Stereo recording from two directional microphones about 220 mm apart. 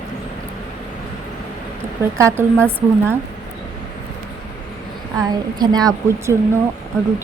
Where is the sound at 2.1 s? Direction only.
10° right (ahead or behind).